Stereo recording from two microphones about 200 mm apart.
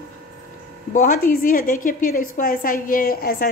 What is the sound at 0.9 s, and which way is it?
A woman's voice, 40° left (ahead or behind).